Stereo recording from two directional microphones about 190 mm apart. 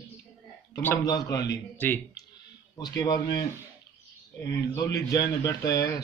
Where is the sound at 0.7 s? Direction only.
15° left (ahead or behind).